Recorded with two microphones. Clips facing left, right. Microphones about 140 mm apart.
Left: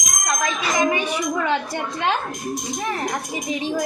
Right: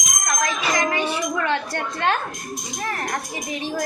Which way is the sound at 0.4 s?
15° left (ahead or behind).